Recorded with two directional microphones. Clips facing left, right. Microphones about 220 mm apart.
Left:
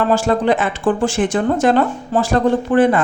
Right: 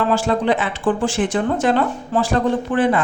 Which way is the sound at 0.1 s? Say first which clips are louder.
Left 3 dB; 45° left (ahead or behind).